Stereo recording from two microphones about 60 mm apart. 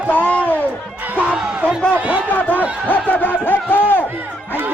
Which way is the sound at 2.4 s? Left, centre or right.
Left.